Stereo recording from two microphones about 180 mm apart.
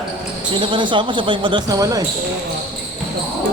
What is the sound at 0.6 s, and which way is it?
Speech, 25° right (ahead or behind).